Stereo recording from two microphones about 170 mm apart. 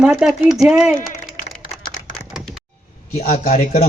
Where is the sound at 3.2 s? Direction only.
55° left (ahead or behind).